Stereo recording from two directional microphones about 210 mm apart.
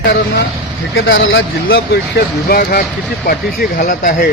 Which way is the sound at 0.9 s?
65° left (ahead or behind).